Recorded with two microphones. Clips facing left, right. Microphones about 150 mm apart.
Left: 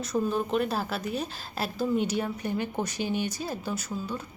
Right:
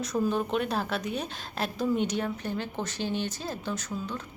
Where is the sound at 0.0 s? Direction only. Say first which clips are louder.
Even; centre (ahead or behind).